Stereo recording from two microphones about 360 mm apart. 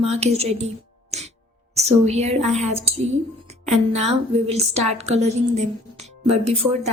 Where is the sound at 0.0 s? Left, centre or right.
Centre.